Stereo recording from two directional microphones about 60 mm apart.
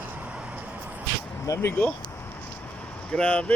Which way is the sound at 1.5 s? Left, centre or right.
Left.